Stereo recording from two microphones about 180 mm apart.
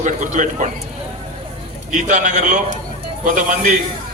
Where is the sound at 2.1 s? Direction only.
45° right (ahead or behind).